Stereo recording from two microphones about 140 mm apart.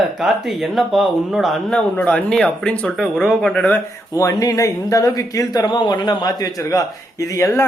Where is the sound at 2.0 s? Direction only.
10° left (ahead or behind).